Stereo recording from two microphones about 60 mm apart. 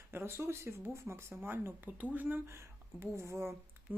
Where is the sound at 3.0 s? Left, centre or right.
Right.